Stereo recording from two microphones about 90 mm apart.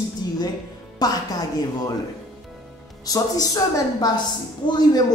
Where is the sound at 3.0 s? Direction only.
40° left (ahead or behind).